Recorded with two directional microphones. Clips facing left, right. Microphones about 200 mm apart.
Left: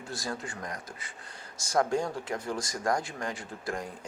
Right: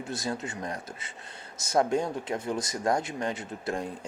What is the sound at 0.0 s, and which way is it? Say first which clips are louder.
Speech: right 4 dB; 20° right (ahead or behind).